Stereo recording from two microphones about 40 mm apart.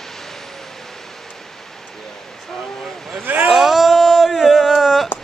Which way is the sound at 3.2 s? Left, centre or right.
Right.